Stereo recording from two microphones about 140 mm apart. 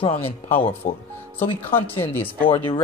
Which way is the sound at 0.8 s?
60° left (ahead or behind).